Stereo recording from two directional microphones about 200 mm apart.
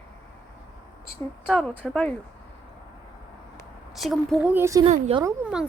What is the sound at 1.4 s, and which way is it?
Speech, 5° left (ahead or behind).